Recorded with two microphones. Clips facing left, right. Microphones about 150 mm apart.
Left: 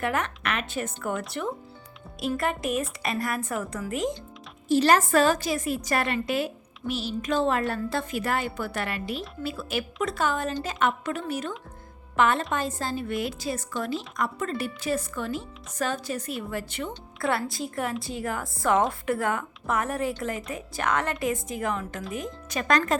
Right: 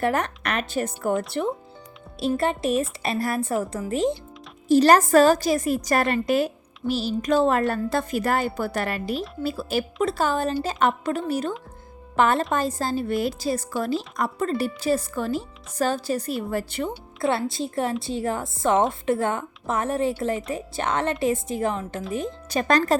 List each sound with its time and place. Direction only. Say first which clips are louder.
0.0 s a woman's voice: right 4 dB; 35° right (ahead or behind)
4.7 s a woman's voice: right 5 dB; 40° right (ahead or behind)
17.2 s a woman's voice: right 3 dB; 25° right (ahead or behind)